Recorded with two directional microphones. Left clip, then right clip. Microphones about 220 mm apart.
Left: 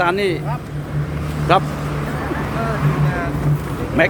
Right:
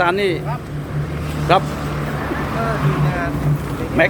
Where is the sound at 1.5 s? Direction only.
5° left (ahead or behind).